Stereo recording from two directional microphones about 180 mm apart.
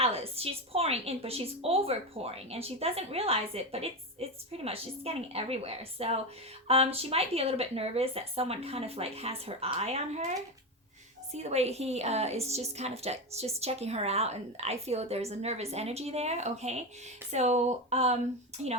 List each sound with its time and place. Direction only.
0.0 s a woman's voice: 35° right (ahead or behind)